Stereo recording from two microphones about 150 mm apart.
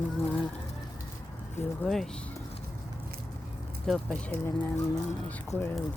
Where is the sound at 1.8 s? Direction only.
5° left (ahead or behind).